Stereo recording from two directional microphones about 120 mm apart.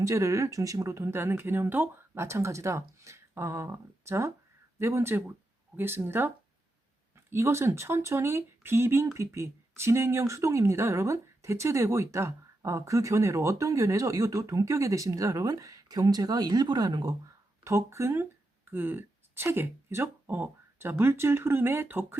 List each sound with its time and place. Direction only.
0.0 s speech: 25° right (ahead or behind)
17.6 s speech: 25° right (ahead or behind)